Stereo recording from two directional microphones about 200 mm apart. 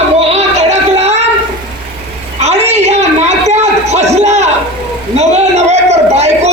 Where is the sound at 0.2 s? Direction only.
30° right (ahead or behind).